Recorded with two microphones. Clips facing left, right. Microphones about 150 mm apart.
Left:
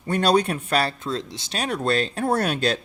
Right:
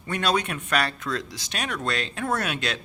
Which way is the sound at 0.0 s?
35° left (ahead or behind).